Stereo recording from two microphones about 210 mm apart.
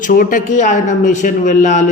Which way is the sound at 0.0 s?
40° left (ahead or behind).